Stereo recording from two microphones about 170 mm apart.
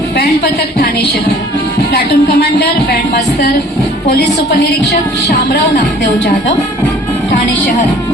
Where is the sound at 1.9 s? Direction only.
70° left (ahead or behind).